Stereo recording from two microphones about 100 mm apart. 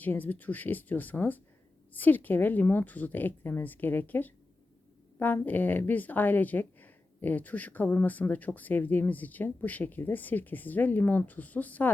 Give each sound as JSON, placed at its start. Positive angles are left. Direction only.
{"t": 0.0, "sound": "a woman's voice", "side_deg": 15}